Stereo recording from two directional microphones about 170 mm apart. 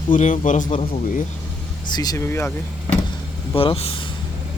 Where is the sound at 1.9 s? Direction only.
25° left (ahead or behind).